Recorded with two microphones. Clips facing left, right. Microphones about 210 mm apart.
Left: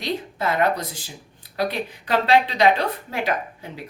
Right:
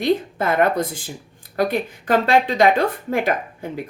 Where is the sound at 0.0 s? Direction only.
50° right (ahead or behind).